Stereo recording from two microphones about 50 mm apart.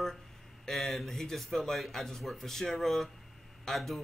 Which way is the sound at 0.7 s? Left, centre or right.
Centre.